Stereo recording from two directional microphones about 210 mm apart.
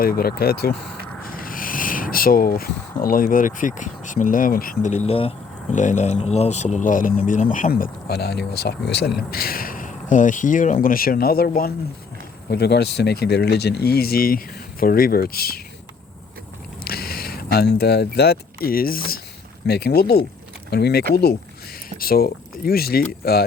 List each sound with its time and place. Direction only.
0.0 s speech: 45° left (ahead or behind)
16.8 s speech: 45° left (ahead or behind)